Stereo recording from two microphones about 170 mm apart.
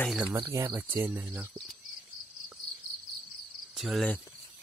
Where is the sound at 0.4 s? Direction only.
20° right (ahead or behind).